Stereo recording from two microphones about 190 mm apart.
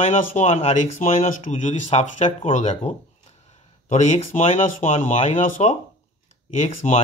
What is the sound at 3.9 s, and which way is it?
Speech, 35° left (ahead or behind).